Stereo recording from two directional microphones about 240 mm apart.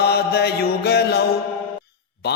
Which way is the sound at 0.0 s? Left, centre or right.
Left.